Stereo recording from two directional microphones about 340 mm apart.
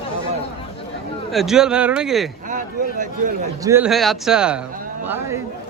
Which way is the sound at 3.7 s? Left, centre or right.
Centre.